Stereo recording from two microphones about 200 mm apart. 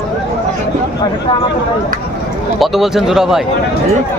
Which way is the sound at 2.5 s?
Centre (ahead or behind).